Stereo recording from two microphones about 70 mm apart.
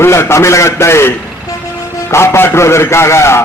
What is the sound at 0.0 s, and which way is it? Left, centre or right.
A man's voice, left.